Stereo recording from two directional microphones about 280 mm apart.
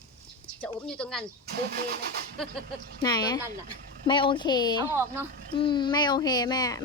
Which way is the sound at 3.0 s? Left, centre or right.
Centre.